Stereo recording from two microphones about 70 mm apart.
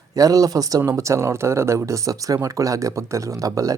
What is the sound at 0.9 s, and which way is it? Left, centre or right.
Speech, right.